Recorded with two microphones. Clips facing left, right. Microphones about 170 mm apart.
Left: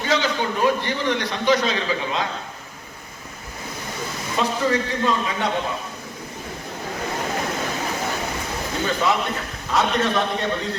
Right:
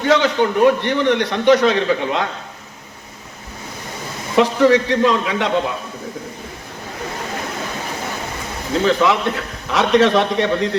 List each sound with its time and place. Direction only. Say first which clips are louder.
0.0 s a man's voice: right 7 dB; 60° right (ahead or behind)
4.4 s a man's voice: right 9 dB; 80° right
8.8 s a man's voice: right 6 dB; 80° right